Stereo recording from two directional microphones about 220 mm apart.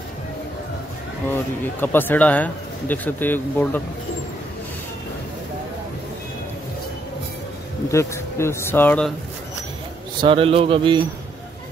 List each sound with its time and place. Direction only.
1.3 s speech: 10° left (ahead or behind)
7.9 s speech: 15° left (ahead or behind)
10.2 s a man's voice: 25° right (ahead or behind)